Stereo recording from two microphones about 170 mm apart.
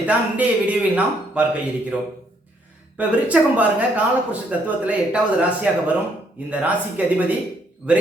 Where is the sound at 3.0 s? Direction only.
10° right (ahead or behind).